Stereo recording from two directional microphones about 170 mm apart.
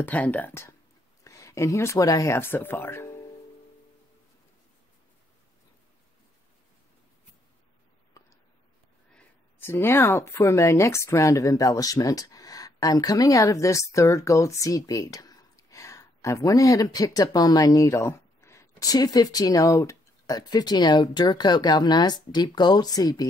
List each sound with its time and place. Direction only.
0.0 s speech: 10° left (ahead or behind)
8.2 s a sound: 20° left (ahead or behind)
9.1 s speech: 15° left (ahead or behind)